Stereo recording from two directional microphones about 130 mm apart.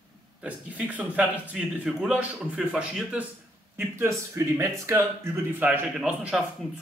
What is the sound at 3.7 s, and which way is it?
Speech, 20° right (ahead or behind).